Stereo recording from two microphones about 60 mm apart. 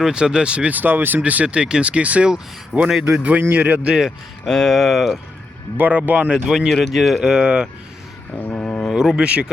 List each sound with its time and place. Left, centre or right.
0.0 s speech: centre
4.4 s speech: centre
5.7 s speech: right
6.3 s speech: centre
8.4 s a sound: left
8.9 s speech: centre